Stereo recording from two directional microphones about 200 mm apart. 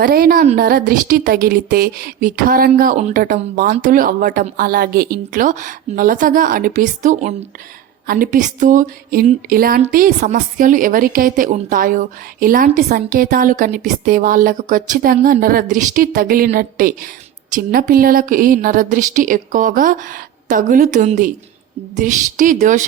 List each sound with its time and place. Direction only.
0.0 s a woman's voice: 50° right (ahead or behind)